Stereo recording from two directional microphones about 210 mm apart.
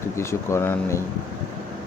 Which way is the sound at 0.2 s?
15° left (ahead or behind).